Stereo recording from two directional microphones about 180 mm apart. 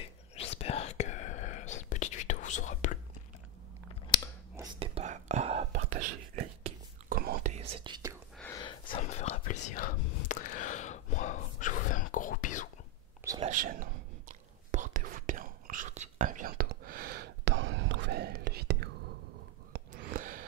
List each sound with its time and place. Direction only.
0.4 s whispering: 35° left (ahead or behind)
4.7 s whispering: 35° right (ahead or behind)
7.1 s whispering: 55° right (ahead or behind)
7.5 s whispering: 25° right (ahead or behind)
8.8 s whispering: 40° left (ahead or behind)
13.5 s whispering: 50° right (ahead or behind)
19.7 s gasp: 50° right (ahead or behind)